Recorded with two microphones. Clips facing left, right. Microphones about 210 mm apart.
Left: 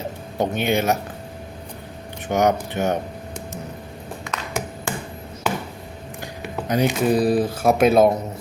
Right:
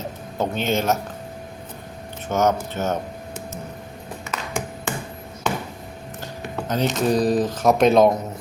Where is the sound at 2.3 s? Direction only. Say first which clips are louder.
Left 1 dB; 15° left (ahead or behind).